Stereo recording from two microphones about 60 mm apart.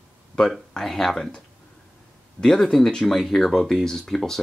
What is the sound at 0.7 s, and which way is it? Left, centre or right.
Speech, centre.